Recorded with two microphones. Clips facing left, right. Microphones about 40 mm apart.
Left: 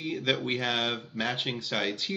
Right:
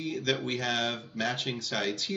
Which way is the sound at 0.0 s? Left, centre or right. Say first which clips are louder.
Left 1 dB; left.